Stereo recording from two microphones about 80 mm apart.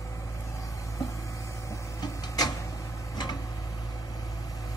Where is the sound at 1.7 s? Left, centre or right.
Left.